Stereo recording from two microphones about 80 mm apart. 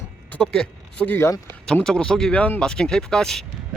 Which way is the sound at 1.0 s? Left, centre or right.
Left.